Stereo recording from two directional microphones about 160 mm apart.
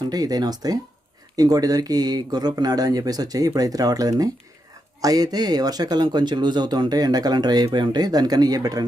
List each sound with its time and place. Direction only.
0.0 s speech: 25° right (ahead or behind)